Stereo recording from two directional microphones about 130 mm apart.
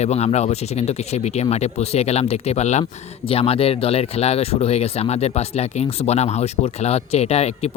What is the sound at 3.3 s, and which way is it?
Speech, 45° left (ahead or behind).